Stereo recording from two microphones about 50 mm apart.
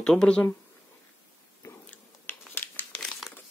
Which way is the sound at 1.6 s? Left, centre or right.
Left.